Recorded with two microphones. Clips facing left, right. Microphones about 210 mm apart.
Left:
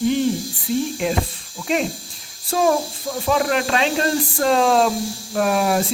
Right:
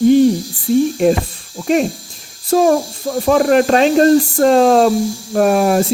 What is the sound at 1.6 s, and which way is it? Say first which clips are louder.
Speech: right 7 dB; 45° right (ahead or behind).